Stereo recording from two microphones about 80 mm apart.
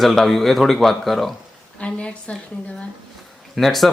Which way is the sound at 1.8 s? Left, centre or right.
Centre.